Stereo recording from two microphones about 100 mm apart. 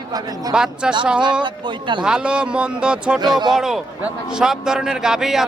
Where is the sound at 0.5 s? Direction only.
10° right (ahead or behind).